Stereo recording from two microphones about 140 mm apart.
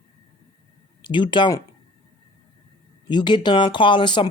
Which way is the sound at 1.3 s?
30° left (ahead or behind).